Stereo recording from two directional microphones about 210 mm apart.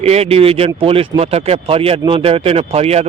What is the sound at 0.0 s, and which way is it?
Speech, 30° right (ahead or behind).